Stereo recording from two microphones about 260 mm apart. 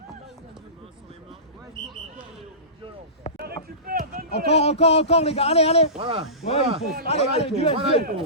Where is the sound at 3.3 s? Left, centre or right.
Right.